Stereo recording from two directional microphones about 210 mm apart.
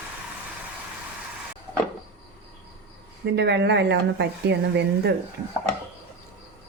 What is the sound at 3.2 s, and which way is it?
A woman's voice, 55° right (ahead or behind).